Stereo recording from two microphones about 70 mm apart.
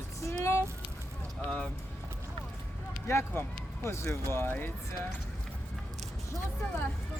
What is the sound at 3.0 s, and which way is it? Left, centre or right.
Speech, left.